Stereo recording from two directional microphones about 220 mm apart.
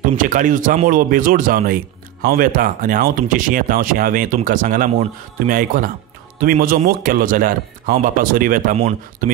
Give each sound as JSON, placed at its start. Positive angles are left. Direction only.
{"t": 0.0, "sound": "speech", "side_deg": -35}